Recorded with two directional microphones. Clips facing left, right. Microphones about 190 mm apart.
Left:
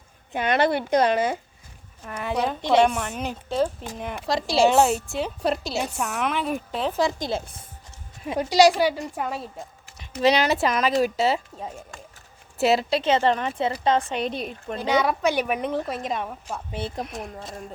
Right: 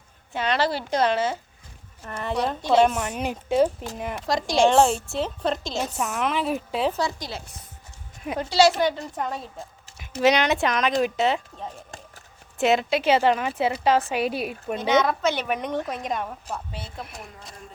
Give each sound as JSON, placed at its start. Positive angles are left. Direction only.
{"t": 0.4, "sound": "speech", "side_deg": 55}
{"t": 0.9, "sound": "a woman's voice", "side_deg": 15}
{"t": 2.6, "sound": "a woman's voice", "side_deg": 15}
{"t": 2.8, "sound": "a woman's voice", "side_deg": -5}
{"t": 6.9, "sound": "a woman's voice", "side_deg": 20}
{"t": 8.4, "sound": "a woman's voice", "side_deg": 15}
{"t": 10.0, "sound": "a woman's voice", "side_deg": 0}
{"t": 14.8, "sound": "speech", "side_deg": 10}